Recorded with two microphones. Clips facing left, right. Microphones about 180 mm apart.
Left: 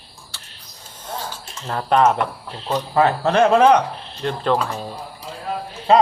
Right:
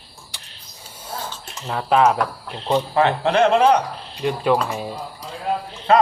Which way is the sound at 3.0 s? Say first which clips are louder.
Left 2 dB; 40° left (ahead or behind).